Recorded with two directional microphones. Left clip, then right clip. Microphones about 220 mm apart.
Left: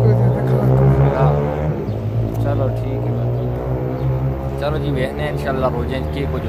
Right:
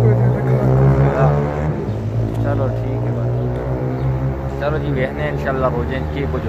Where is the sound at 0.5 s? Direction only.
45° right (ahead or behind).